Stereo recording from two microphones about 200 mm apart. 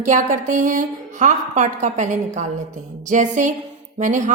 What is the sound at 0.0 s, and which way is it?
A woman's voice, 40° right (ahead or behind).